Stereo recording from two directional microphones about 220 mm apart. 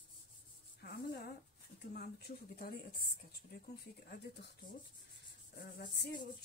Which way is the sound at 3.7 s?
45° left (ahead or behind).